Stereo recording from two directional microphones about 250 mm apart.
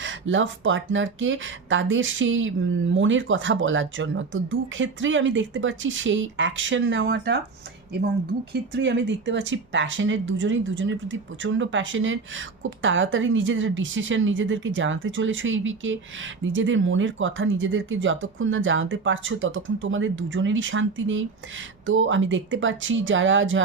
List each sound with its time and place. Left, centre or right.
0.0 s speech: right
8.7 s speech: right